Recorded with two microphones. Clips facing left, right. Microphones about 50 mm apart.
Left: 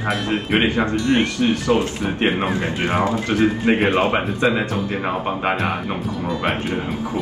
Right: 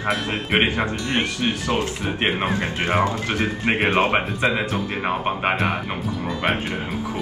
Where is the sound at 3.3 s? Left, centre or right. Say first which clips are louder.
Left 5 dB; right.